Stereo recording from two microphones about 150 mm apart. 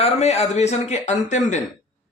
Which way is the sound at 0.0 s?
45° left (ahead or behind).